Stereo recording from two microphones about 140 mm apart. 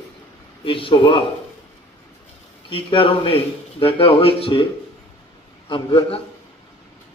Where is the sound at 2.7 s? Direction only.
40° left (ahead or behind).